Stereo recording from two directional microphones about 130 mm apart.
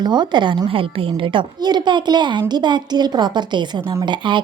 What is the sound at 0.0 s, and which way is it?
A woman's voice, 35° right (ahead or behind).